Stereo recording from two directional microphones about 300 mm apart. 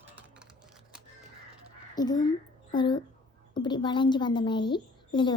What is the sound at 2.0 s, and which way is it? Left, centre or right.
A woman's voice, centre.